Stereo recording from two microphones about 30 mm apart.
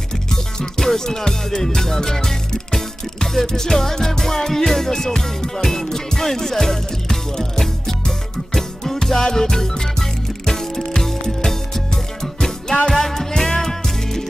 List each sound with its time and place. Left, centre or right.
0.3 s music: centre